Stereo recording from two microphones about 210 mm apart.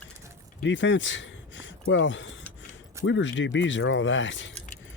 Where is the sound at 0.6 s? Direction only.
60° left (ahead or behind).